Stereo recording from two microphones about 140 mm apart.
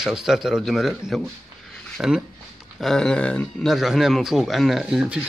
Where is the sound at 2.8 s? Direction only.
5° left (ahead or behind).